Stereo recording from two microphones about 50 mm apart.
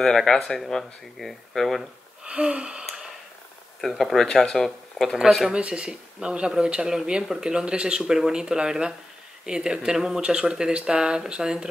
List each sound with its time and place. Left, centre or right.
0.0 s speech: centre
2.2 s speech: right
4.0 s speech: centre
5.5 s speech: right